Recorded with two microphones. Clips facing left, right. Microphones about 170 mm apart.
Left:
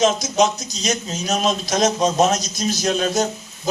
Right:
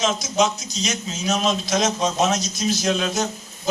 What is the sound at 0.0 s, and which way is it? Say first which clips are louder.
A man's voice: left 4 dB; 40° left (ahead or behind).